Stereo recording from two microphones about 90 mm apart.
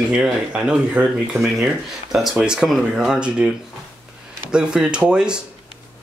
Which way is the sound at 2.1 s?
5° right (ahead or behind).